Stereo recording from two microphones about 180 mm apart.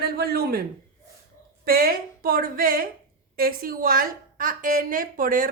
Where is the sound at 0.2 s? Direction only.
60° right (ahead or behind).